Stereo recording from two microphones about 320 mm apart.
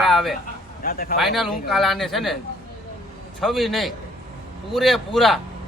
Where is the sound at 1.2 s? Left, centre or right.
Centre.